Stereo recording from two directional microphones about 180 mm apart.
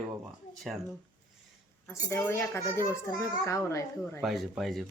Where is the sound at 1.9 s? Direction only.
15° left (ahead or behind).